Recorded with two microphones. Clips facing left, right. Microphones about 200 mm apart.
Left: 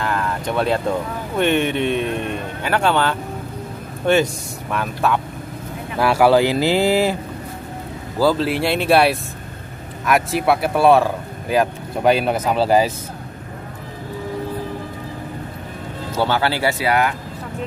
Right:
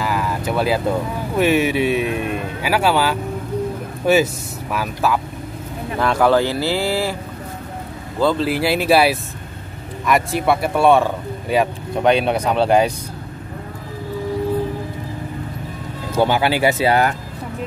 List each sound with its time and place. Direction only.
0.0 s speech: 5° right (ahead or behind)
5.9 s speech: 10° left (ahead or behind)
8.2 s speech: 5° left (ahead or behind)
16.2 s speech: 15° right (ahead or behind)